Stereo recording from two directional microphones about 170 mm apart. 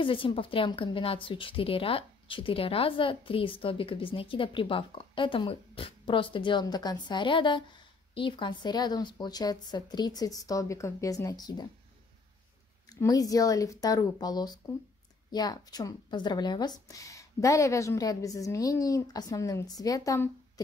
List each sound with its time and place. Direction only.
0.0 s a woman's voice: 30° left (ahead or behind)
12.9 s speech: 20° left (ahead or behind)